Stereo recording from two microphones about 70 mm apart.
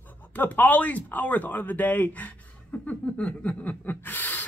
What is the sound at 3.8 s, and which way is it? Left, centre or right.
Gasp, left.